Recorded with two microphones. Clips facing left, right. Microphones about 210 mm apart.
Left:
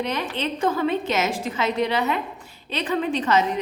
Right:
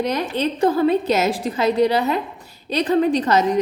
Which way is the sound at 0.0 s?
40° right (ahead or behind).